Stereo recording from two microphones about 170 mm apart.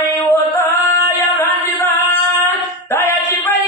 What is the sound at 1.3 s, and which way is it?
Singing, 15° left (ahead or behind).